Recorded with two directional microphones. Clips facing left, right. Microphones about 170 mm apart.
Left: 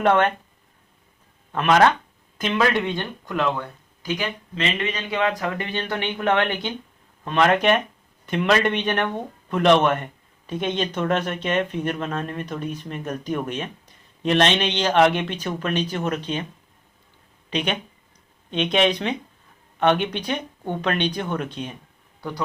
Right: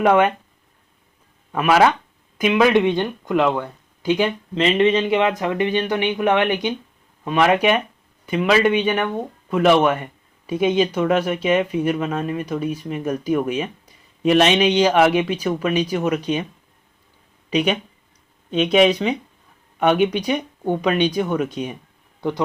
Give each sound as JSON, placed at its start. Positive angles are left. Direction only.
{"t": 0.0, "sound": "speech", "side_deg": -10}
{"t": 1.5, "sound": "speech", "side_deg": -5}
{"t": 17.5, "sound": "speech", "side_deg": -10}